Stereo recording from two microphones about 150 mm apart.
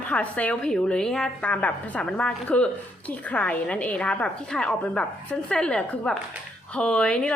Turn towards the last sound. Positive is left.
turn(degrees=5)  # may be behind; listen again after turning